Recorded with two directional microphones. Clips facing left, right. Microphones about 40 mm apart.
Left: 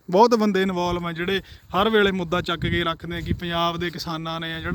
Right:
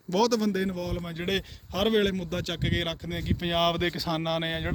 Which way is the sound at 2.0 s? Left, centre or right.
Left.